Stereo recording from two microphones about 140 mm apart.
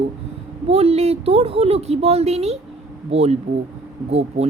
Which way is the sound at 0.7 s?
45° right (ahead or behind).